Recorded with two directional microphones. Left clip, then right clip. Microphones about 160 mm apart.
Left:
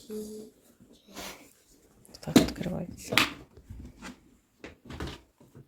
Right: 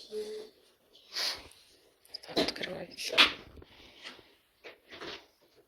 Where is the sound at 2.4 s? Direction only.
20° left (ahead or behind).